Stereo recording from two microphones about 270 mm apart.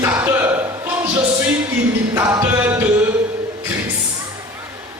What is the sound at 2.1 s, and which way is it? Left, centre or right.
Music, centre.